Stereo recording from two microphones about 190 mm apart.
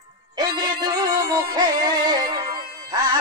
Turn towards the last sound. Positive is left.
turn(degrees=-20)  # may be behind; listen again after turning